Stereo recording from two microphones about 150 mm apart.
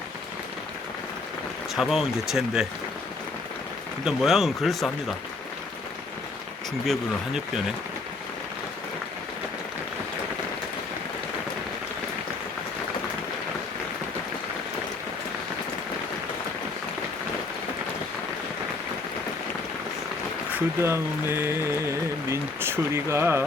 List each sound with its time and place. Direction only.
1.7 s speech: centre (ahead or behind)
4.0 s speech: centre (ahead or behind)
6.8 s speech: centre (ahead or behind)
20.8 s speech: 15° right (ahead or behind)